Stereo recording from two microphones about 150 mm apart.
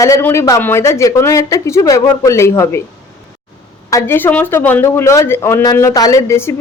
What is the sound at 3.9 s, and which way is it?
Speech, 15° left (ahead or behind).